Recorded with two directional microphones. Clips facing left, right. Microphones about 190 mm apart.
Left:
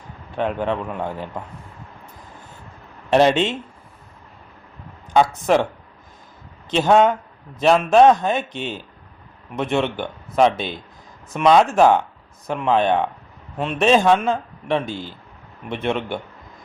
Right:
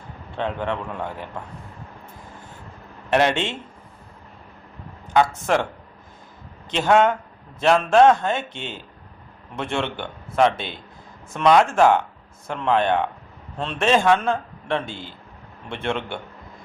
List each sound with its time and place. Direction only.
0.3 s speech: 15° left (ahead or behind)
5.1 s speech: 15° left (ahead or behind)
6.7 s speech: 15° left (ahead or behind)
14.8 s a man's voice: 20° right (ahead or behind)
15.7 s speech: 15° left (ahead or behind)